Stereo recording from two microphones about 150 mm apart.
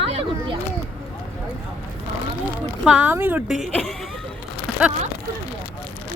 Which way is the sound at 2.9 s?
10° right (ahead or behind).